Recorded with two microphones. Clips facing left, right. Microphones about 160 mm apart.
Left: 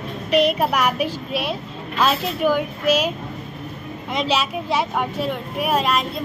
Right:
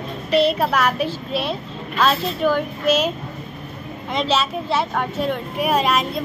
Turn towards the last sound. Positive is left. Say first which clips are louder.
# right 1 dB
turn(degrees=0)  # may be behind; listen again after turning